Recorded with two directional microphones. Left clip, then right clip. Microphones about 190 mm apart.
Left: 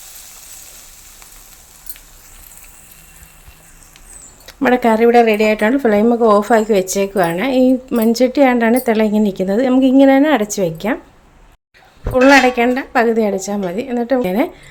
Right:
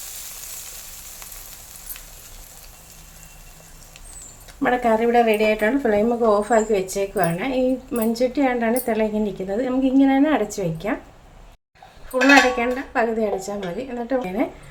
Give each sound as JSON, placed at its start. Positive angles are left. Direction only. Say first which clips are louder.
{"t": 4.4, "sound": "speech", "louder": "left 6 dB", "side_deg": 55}
{"t": 12.1, "sound": "speech", "louder": "left 5 dB", "side_deg": 60}